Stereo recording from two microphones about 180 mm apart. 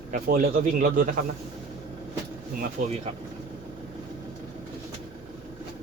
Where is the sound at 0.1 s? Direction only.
50° right (ahead or behind).